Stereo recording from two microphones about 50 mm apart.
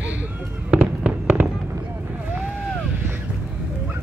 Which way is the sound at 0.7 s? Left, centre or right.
Right.